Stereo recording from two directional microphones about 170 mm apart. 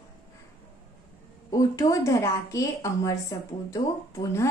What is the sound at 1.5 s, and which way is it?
A woman's voice, 20° left (ahead or behind).